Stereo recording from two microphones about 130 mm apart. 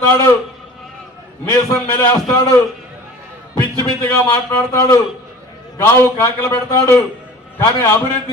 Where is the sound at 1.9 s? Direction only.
15° left (ahead or behind).